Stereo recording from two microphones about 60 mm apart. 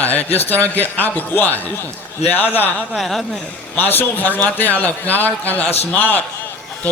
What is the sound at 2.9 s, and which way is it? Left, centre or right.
Speech, centre.